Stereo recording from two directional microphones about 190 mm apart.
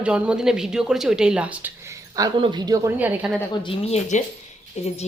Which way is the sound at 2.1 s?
20° right (ahead or behind).